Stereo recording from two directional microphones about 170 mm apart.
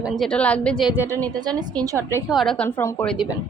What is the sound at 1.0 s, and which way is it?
A woman's voice, 20° right (ahead or behind).